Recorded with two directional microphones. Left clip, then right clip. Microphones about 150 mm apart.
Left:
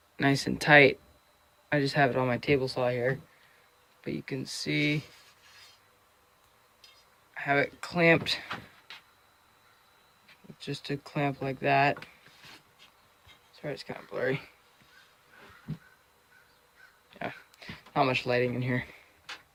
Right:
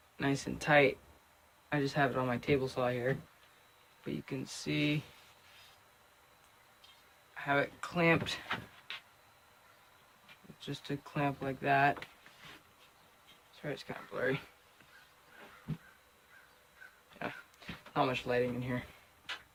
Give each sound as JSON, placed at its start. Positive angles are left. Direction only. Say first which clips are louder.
{"t": 0.2, "sound": "speech", "louder": "left 8 dB", "side_deg": 55}
{"t": 7.3, "sound": "speech", "louder": "left 5 dB", "side_deg": 45}
{"t": 10.6, "sound": "speech", "louder": "left 6 dB", "side_deg": 40}
{"t": 13.6, "sound": "speech", "louder": "left 4 dB", "side_deg": 30}
{"t": 17.2, "sound": "speech", "louder": "left 4 dB", "side_deg": 40}